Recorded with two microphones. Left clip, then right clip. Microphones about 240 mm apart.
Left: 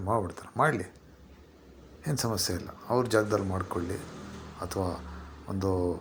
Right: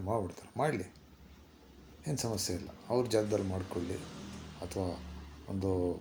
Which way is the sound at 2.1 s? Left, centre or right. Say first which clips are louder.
Left 5 dB; centre.